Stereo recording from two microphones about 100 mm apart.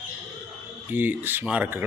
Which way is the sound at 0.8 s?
20° right (ahead or behind).